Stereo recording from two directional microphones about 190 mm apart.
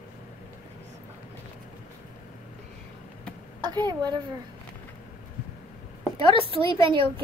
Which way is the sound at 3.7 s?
20° right (ahead or behind).